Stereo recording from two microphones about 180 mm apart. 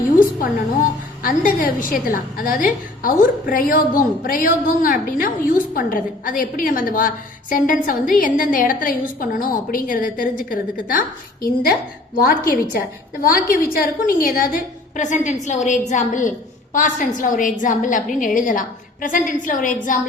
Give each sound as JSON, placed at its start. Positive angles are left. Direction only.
{"t": 1.2, "sound": "a woman's voice", "side_deg": 50}